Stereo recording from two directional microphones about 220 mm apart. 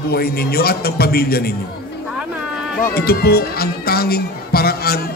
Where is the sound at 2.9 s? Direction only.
45° left (ahead or behind).